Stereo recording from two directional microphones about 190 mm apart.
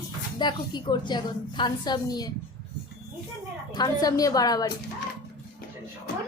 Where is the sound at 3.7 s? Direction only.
20° left (ahead or behind).